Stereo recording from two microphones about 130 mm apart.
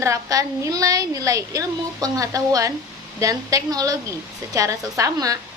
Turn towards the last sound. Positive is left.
turn(degrees=-25)  # may be behind; listen again after turning